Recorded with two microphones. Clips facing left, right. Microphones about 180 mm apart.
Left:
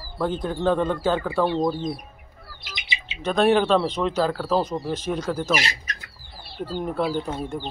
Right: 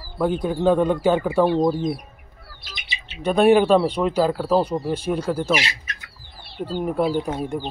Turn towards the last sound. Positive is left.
turn(degrees=-15)  # may be behind; listen again after turning